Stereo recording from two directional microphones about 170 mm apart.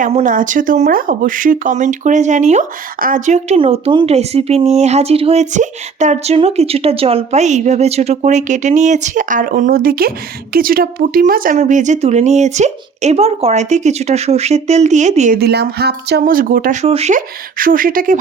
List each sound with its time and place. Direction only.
0.1 s speech: 45° right (ahead or behind)
3.6 s speech: 35° right (ahead or behind)
15.4 s speech: 70° right (ahead or behind); by 16.7 s 55° right (ahead or behind)
16.8 s speech: 40° right (ahead or behind)
17.2 s speech: 55° right (ahead or behind)